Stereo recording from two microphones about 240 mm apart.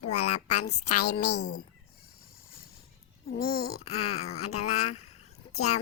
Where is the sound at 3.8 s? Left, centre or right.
Left.